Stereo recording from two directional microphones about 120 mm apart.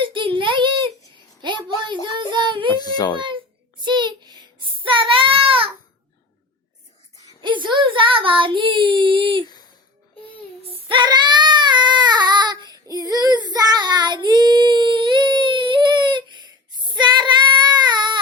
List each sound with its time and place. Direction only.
0.0 s a sound: 45° right (ahead or behind)
1.4 s child singing: 40° right (ahead or behind)
2.8 s a sound: 35° left (ahead or behind)
3.8 s child singing: 40° right (ahead or behind)
7.4 s child singing: 40° right (ahead or behind)
10.7 s child singing: 45° right (ahead or behind)